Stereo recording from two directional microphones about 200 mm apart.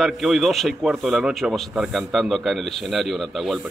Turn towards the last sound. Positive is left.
turn(degrees=0)  # may be behind; listen again after turning